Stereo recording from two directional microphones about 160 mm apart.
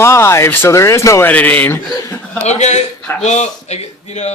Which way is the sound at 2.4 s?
45° left (ahead or behind).